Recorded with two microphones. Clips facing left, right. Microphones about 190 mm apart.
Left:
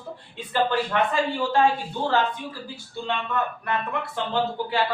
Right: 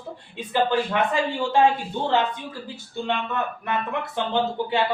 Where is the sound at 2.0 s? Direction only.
20° right (ahead or behind).